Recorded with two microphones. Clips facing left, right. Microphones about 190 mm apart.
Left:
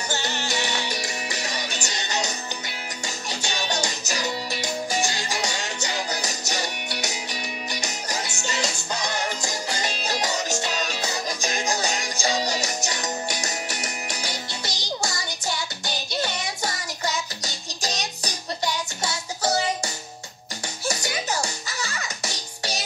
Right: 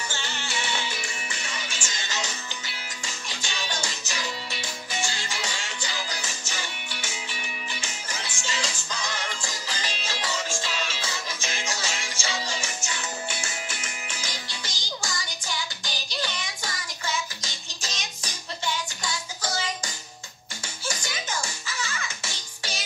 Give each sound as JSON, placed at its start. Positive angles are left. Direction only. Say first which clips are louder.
{"t": 0.1, "sound": "music", "louder": "left 6 dB", "side_deg": 40}
{"t": 14.6, "sound": "music", "louder": "left 6 dB", "side_deg": 70}
{"t": 15.0, "sound": "music", "louder": "left 3 dB", "side_deg": 40}
{"t": 16.3, "sound": "music", "louder": "left 6 dB", "side_deg": 40}
{"t": 21.1, "sound": "music", "louder": "left 6 dB", "side_deg": 35}